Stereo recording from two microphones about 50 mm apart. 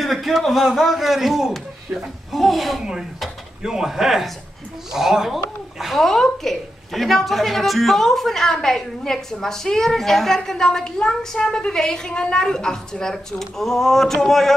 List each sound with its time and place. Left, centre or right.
0.0 s a man's voice: centre